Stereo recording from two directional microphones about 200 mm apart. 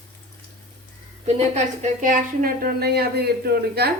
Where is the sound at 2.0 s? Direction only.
45° right (ahead or behind).